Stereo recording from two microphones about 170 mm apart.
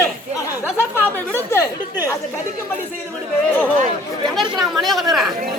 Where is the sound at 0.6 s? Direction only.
15° left (ahead or behind).